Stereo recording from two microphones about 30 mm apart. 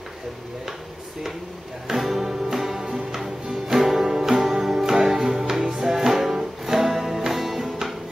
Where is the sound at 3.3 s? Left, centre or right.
Right.